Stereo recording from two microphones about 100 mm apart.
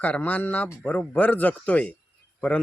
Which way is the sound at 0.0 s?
15° left (ahead or behind).